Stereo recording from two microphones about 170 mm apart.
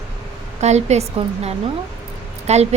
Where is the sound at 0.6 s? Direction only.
40° right (ahead or behind).